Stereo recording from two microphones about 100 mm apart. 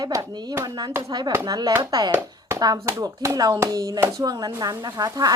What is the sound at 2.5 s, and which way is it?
Speech, 35° right (ahead or behind).